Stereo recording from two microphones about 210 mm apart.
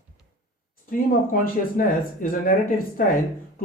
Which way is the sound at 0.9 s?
40° left (ahead or behind).